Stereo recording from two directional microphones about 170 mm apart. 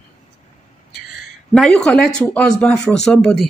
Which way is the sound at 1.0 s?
Centre (ahead or behind).